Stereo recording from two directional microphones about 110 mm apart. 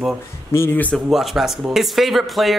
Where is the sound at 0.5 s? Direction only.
20° left (ahead or behind).